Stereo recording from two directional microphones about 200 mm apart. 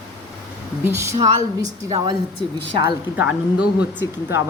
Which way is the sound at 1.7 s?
25° right (ahead or behind).